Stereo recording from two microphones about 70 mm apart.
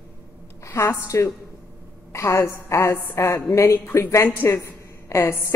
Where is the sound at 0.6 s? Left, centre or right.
Left.